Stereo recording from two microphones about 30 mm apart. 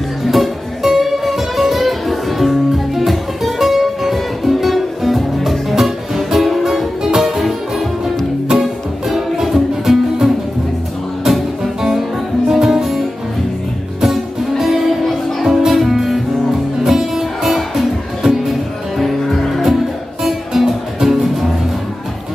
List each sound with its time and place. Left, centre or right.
0.2 s music: centre
11.2 s music: centre
14.6 s music: centre